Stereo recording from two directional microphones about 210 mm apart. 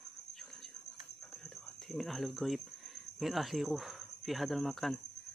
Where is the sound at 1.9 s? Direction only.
Centre (ahead or behind).